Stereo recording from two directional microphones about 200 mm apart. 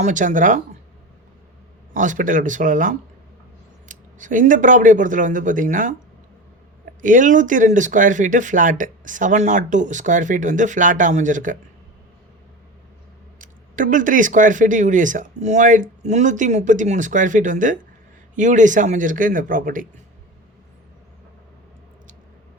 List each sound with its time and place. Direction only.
0.0 s speech: 40° right (ahead or behind)
1.9 s speech: 40° right (ahead or behind)
13.4 s speech: 40° right (ahead or behind)